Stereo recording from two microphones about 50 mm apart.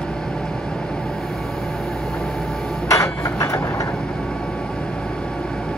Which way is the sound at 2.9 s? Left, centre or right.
Left.